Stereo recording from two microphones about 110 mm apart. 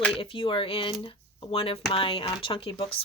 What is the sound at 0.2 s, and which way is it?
Speech, 50° left (ahead or behind).